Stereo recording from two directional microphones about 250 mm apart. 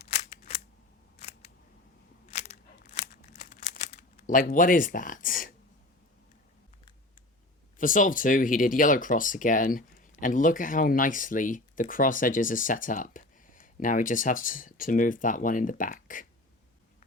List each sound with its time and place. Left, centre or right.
0.2 s scissors: left
2.3 s a sound: left
3.0 s crumpling: left
4.3 s speech: left
7.8 s speech: left